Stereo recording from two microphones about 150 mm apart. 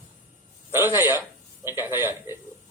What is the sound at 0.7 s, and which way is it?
A man's voice, 15° right (ahead or behind).